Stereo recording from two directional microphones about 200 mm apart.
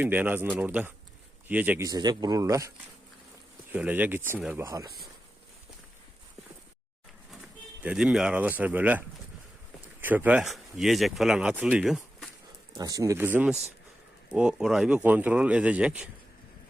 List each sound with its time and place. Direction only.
0.0 s speech: 10° right (ahead or behind)
1.9 s speech: 20° right (ahead or behind)
7.8 s speech: 5° right (ahead or behind)
12.7 s speech: 15° right (ahead or behind)